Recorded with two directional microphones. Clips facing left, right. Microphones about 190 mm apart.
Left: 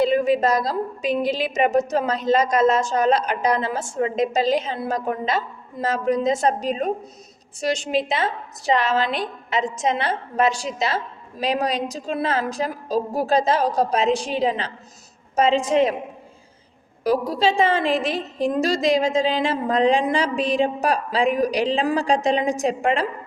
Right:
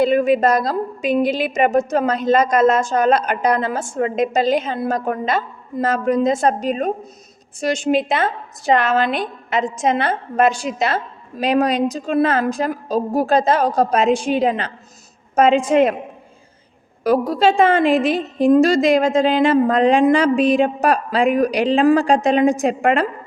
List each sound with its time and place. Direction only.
0.0 s a woman's voice: 55° right (ahead or behind)
17.0 s a woman's voice: 55° right (ahead or behind)